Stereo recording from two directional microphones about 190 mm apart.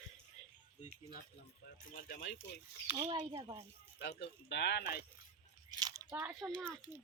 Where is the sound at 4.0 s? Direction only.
65° left (ahead or behind).